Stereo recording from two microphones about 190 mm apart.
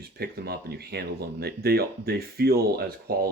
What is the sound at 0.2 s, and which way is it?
Speech, 55° right (ahead or behind).